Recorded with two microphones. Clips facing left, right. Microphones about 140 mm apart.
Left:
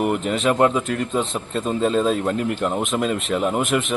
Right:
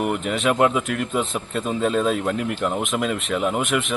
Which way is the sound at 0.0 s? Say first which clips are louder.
Left 2 dB; centre (ahead or behind).